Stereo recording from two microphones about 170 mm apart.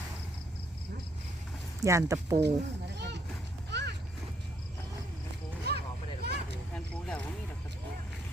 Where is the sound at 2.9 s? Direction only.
90° right.